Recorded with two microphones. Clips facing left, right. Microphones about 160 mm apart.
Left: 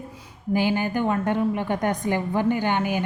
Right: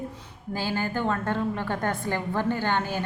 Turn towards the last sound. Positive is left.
turn(degrees=15)  # may be behind; listen again after turning